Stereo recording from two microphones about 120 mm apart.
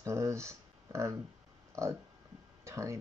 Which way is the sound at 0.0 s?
25° right (ahead or behind).